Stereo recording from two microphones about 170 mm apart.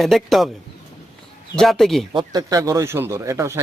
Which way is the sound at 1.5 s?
Centre (ahead or behind).